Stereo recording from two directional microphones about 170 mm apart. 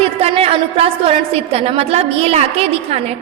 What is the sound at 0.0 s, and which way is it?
A woman's voice, 35° right (ahead or behind).